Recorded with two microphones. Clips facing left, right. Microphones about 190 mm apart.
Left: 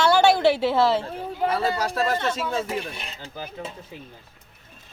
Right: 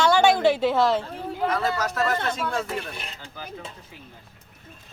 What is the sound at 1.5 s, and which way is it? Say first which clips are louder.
Speech: left 1 dB; 30° left (ahead or behind).